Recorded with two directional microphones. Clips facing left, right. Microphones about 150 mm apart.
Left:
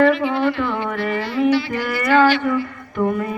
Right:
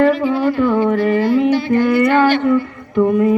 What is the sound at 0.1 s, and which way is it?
Speech, 40° right (ahead or behind).